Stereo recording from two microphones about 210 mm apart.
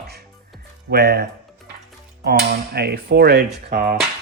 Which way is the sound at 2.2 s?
50° right (ahead or behind).